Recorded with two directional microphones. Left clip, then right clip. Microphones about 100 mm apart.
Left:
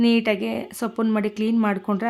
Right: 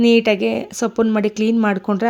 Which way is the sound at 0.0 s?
40° right (ahead or behind).